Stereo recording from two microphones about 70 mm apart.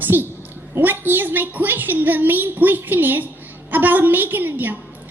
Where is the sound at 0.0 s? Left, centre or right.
Right.